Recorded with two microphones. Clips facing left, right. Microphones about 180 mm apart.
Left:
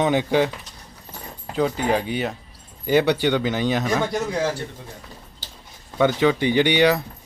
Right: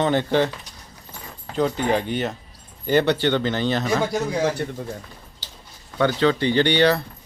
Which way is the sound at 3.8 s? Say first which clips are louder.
Right 1 dB; 5° right (ahead or behind).